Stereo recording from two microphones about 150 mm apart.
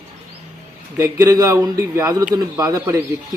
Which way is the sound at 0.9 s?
20° right (ahead or behind).